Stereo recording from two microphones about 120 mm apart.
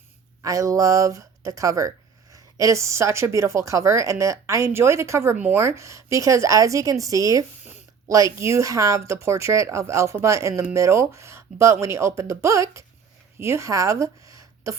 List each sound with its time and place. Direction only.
0.4 s speech: 25° right (ahead or behind)
7.6 s a sound: 15° right (ahead or behind)
8.0 s speech: 25° right (ahead or behind)